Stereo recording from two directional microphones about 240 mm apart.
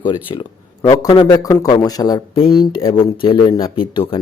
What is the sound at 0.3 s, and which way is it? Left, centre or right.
Speech, centre.